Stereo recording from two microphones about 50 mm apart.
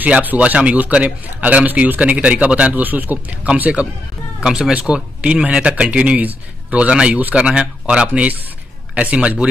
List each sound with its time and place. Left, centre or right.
0.0 s speech: right
4.4 s a man's voice: centre